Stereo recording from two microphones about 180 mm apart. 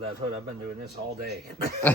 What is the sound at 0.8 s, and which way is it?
Speech, 60° right (ahead or behind).